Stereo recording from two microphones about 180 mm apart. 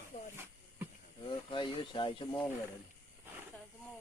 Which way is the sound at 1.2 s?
25° left (ahead or behind).